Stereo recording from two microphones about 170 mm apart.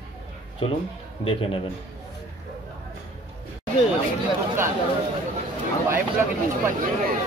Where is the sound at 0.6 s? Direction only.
35° left (ahead or behind).